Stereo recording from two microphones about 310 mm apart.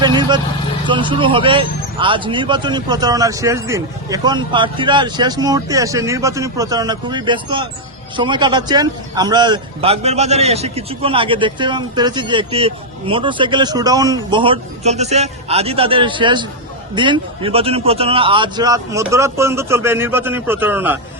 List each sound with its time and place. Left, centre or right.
0.0 s a man's voice: centre